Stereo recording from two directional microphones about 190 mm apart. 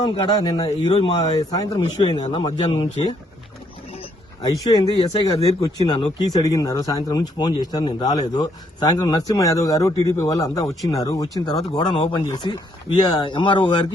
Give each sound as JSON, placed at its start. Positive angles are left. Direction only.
{"t": 0.0, "sound": "speech", "side_deg": 20}
{"t": 4.4, "sound": "speech", "side_deg": 20}